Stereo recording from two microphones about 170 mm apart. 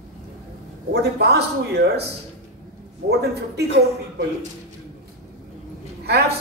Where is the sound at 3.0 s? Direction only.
70° right (ahead or behind).